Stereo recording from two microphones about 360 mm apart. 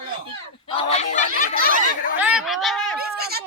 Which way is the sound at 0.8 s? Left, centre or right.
Centre.